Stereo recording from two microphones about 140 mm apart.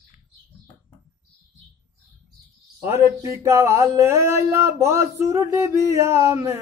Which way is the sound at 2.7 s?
25° right (ahead or behind).